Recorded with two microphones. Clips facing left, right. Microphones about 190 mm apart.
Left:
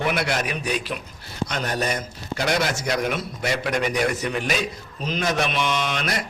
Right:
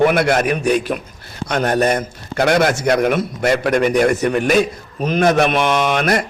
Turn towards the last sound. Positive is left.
turn(degrees=-55)  # may be behind; listen again after turning